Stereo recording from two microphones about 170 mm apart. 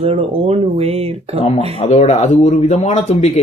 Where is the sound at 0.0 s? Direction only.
35° right (ahead or behind).